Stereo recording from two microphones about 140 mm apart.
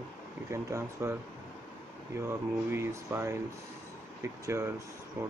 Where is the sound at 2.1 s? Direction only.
20° right (ahead or behind).